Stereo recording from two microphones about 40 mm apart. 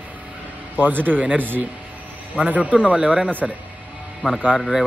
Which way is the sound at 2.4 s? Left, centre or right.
Right.